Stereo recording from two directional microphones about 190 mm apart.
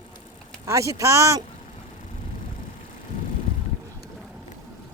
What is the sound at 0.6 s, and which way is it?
Speech, 15° right (ahead or behind).